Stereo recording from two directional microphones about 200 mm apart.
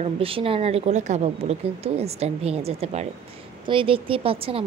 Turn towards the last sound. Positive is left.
turn(degrees=-25)  # may be behind; listen again after turning